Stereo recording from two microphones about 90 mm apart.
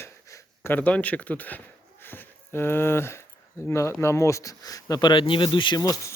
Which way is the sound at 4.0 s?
35° left (ahead or behind).